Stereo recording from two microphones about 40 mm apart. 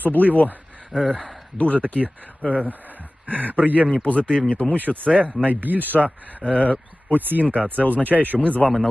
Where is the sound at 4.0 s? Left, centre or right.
Left.